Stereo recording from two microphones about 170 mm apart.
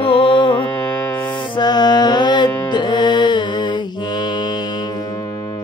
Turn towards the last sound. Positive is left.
turn(degrees=25)  # may be behind; listen again after turning